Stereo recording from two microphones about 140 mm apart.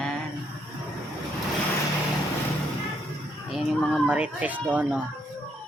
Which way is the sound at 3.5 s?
Centre (ahead or behind).